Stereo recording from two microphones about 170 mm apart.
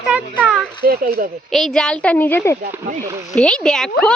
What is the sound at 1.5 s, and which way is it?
A woman's voice, centre (ahead or behind).